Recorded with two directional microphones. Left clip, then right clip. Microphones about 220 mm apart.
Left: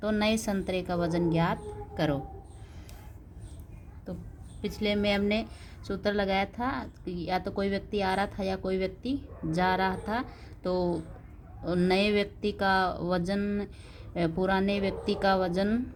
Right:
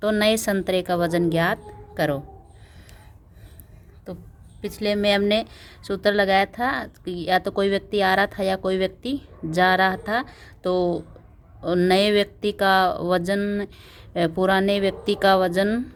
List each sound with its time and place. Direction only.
0.0 s a woman's voice: 35° right (ahead or behind)
4.6 s a woman's voice: 30° right (ahead or behind)